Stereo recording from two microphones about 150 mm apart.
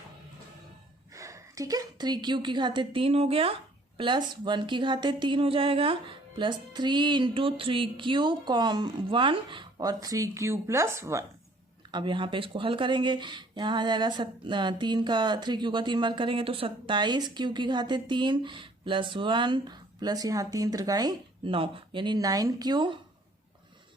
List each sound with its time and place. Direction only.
1.1 s a woman's voice: 20° right (ahead or behind)
11.9 s speech: 30° right (ahead or behind)